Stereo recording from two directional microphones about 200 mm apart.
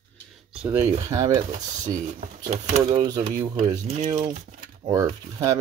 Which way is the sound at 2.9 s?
20° right (ahead or behind).